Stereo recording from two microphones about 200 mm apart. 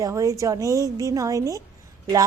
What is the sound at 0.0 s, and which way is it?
A woman's voice, 15° right (ahead or behind).